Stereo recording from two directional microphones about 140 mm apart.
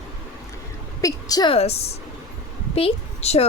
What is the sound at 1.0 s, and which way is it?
Speech, 30° left (ahead or behind).